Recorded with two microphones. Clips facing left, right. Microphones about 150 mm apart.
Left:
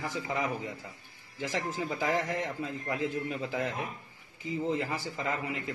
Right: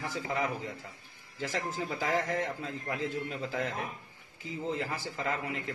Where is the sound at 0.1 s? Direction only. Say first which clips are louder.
Right 2 dB; 20° left (ahead or behind).